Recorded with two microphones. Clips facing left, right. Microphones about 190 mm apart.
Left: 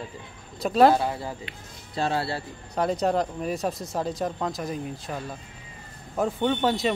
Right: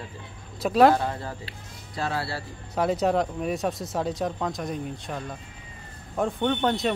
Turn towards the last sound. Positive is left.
turn(degrees=0)  # may be behind; listen again after turning